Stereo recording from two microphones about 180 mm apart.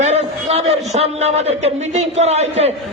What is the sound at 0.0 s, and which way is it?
A man's voice, 40° right (ahead or behind).